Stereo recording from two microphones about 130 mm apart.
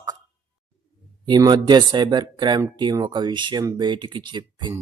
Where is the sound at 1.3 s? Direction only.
35° right (ahead or behind).